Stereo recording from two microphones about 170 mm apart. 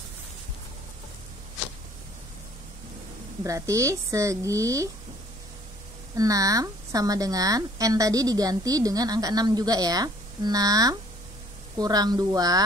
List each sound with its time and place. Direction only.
3.4 s speech: 20° right (ahead or behind)
6.1 s speech: 20° right (ahead or behind)